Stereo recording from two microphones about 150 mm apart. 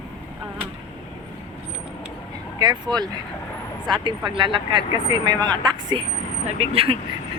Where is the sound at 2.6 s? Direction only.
30° right (ahead or behind).